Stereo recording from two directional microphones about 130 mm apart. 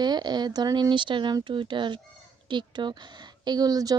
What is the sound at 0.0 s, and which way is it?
Speech, 35° right (ahead or behind).